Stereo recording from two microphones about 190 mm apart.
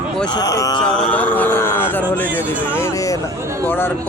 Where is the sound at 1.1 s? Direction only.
10° left (ahead or behind).